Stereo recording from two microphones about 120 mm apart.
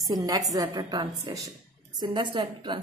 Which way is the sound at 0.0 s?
30° right (ahead or behind).